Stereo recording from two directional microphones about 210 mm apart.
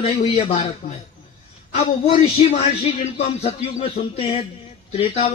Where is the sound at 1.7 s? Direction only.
25° left (ahead or behind).